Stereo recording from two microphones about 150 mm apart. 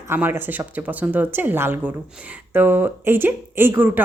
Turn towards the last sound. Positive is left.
turn(degrees=-15)  # may be behind; listen again after turning